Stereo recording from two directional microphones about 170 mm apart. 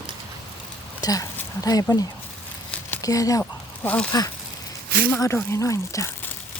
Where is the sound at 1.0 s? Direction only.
20° left (ahead or behind).